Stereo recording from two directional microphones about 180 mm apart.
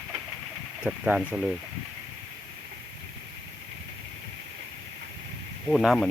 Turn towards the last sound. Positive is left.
turn(degrees=0)  # may be behind; listen again after turning